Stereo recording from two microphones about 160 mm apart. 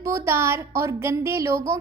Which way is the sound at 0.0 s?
15° right (ahead or behind).